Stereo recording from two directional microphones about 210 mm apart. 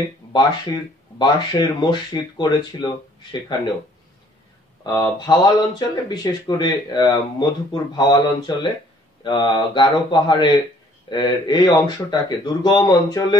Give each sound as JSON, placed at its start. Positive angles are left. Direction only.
{"t": 1.1, "sound": "speech", "side_deg": 20}
{"t": 4.8, "sound": "speech", "side_deg": 20}